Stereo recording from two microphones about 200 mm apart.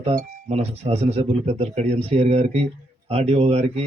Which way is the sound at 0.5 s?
30° right (ahead or behind).